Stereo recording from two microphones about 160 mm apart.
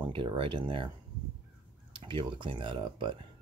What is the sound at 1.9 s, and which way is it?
Speech, 30° right (ahead or behind).